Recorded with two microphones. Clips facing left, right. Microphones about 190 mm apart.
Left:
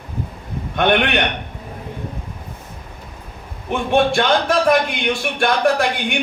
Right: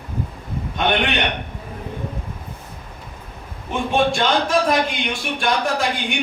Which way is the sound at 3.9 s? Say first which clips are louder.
Left 3 dB; 60° left (ahead or behind).